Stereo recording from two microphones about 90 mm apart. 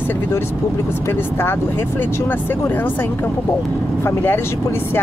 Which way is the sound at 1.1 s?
25° left (ahead or behind).